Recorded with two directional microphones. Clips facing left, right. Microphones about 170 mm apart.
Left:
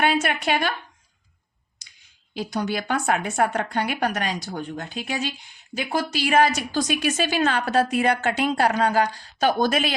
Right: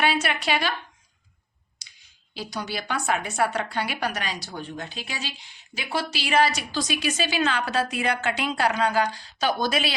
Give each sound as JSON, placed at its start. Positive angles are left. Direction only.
{"t": 0.0, "sound": "a woman's voice", "side_deg": 50}
{"t": 2.3, "sound": "a woman's voice", "side_deg": 50}